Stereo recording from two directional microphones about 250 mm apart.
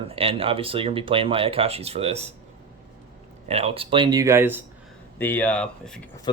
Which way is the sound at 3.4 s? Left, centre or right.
Right.